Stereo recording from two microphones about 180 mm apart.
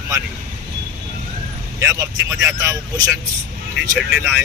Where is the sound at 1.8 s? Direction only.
15° right (ahead or behind).